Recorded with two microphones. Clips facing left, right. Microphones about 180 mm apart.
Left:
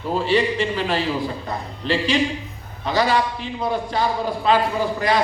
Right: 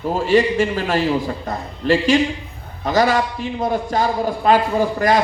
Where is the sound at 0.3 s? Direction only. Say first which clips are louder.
Right 5 dB; 45° right (ahead or behind).